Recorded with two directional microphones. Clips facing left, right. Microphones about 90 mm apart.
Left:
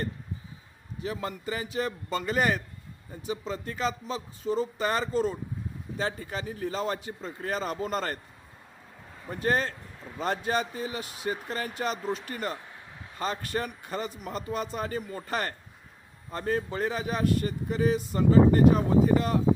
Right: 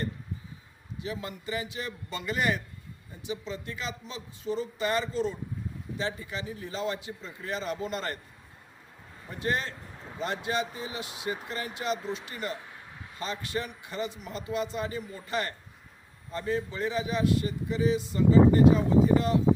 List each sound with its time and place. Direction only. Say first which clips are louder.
0.9 s a man's voice: left 3 dB; 40° left (ahead or behind)
9.4 s a man's voice: left 4 dB; 40° left (ahead or behind)